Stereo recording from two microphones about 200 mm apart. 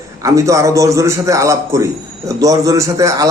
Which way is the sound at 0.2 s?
15° right (ahead or behind).